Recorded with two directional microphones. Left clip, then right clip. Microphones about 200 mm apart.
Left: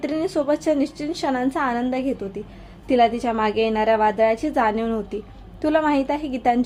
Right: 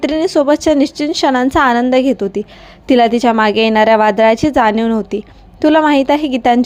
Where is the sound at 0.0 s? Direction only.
40° right (ahead or behind).